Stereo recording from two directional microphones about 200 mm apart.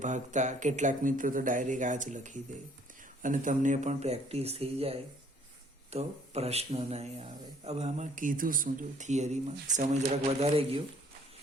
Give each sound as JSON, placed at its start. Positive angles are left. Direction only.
{"t": 0.0, "sound": "speech", "side_deg": -40}